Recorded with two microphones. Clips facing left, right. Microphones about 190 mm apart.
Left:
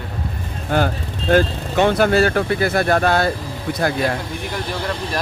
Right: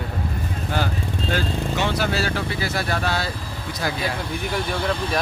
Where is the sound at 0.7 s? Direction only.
50° left (ahead or behind).